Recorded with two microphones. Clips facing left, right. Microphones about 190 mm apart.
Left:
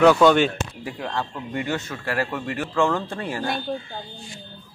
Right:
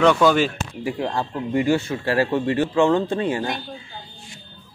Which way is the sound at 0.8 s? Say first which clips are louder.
Right 6 dB; 25° right (ahead or behind).